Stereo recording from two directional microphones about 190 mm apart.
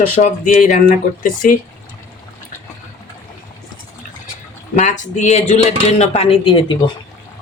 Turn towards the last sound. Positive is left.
turn(degrees=25)  # may be behind; listen again after turning